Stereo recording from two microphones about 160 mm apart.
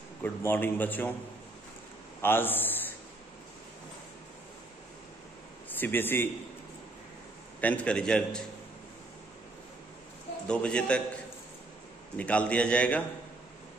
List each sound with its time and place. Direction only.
0.2 s a man's voice: 10° left (ahead or behind)
2.2 s a sound: 15° left (ahead or behind)
5.7 s a man's voice: 10° left (ahead or behind)
7.6 s a man's voice: 10° left (ahead or behind)
10.5 s a man's voice: 5° left (ahead or behind)
12.2 s a man's voice: 10° left (ahead or behind)